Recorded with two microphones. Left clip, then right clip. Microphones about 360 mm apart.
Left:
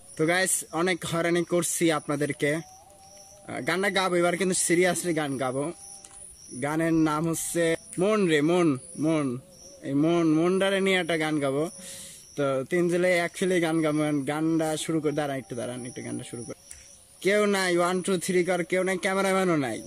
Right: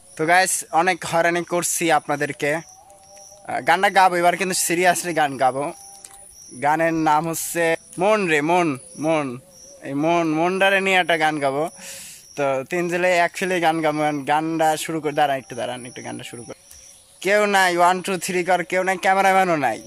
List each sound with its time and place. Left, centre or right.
0.2 s speech: centre